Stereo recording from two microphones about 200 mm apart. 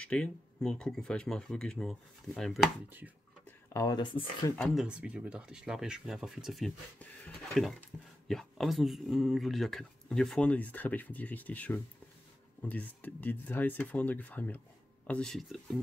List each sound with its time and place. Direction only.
0.0 s speech: 5° left (ahead or behind)
3.4 s speech: 15° left (ahead or behind)
4.6 s speech: centre (ahead or behind)